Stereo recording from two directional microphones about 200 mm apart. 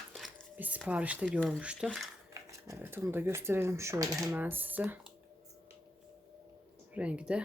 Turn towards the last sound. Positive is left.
turn(degrees=-5)  # may be behind; listen again after turning